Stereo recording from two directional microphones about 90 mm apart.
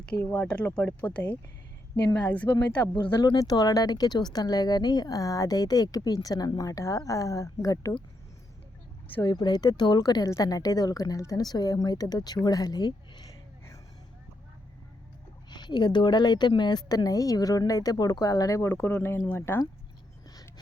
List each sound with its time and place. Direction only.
0.2 s speech: 25° left (ahead or behind)
0.4 s speech: 10° left (ahead or behind)
2.8 s speech: 55° left (ahead or behind)
3.3 s speech: 45° left (ahead or behind)
9.2 s speech: 50° left (ahead or behind)
15.4 s speech: 55° left (ahead or behind); by 18.7 s 40° left (ahead or behind)
18.7 s speech: 25° left (ahead or behind)